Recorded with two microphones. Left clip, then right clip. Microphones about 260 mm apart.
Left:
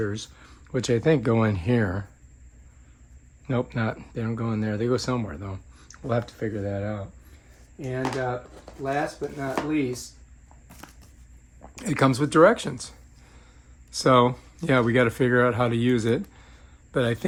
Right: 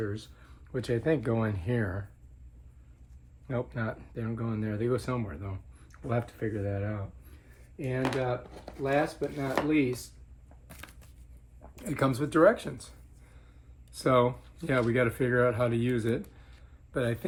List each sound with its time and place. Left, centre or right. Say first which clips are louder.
0.0 s speech: left 6 dB; left
3.4 s speech: left 6 dB; left; by 7.0 s centre
7.9 s speech: left 3 dB; centre
11.7 s speech: left 7 dB; left
13.9 s speech: left 6 dB; left